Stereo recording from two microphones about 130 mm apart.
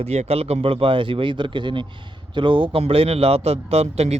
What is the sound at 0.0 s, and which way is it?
A man's voice, 55° right (ahead or behind).